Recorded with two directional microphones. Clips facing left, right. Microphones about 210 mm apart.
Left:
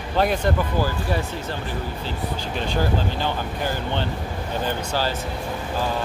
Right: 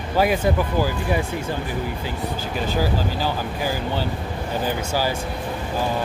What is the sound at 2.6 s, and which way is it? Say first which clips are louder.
Speech: right 1 dB; 5° right (ahead or behind).